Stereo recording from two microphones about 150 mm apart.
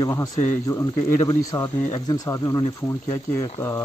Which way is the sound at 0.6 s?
25° left (ahead or behind).